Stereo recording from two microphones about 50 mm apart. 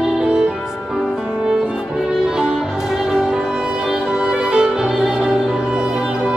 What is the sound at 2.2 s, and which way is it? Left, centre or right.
Music, centre.